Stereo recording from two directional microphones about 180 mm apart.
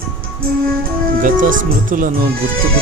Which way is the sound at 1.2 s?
50° right (ahead or behind).